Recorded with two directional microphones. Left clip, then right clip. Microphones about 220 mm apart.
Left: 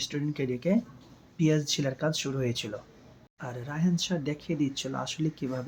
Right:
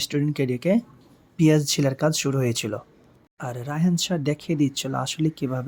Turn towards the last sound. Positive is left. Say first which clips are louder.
# right 6 dB
turn(degrees=-45)  # may be behind; listen again after turning